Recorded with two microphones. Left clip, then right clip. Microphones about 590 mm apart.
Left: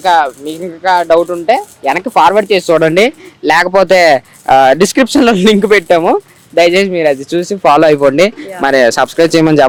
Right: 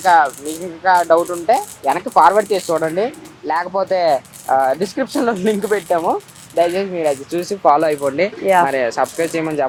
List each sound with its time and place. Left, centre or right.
0.0 s speech: left
3.9 s speech: left
4.4 s speech: left
6.6 s speech: left